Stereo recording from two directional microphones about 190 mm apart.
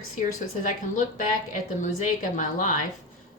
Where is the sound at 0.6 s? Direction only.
45° left (ahead or behind).